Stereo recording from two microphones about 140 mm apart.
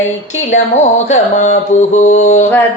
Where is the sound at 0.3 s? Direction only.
55° left (ahead or behind).